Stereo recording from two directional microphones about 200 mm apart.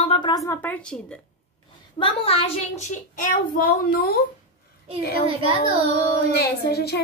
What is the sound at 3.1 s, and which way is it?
A child's voice, 45° left (ahead or behind).